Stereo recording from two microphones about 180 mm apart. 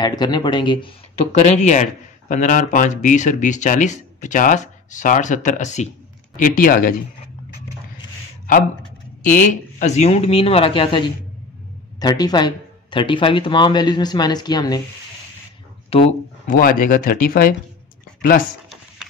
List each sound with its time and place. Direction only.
0.0 s speech: 25° left (ahead or behind)
1.3 s speech: 35° left (ahead or behind)
9.2 s speech: 45° left (ahead or behind); by 14.8 s 20° left (ahead or behind)
15.9 s speech: 35° left (ahead or behind)
16.4 s speech: 50° left (ahead or behind)